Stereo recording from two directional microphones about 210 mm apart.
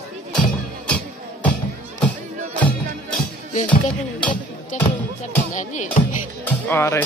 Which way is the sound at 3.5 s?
35° left (ahead or behind).